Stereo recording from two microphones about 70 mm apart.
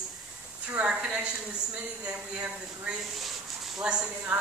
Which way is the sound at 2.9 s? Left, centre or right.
Centre.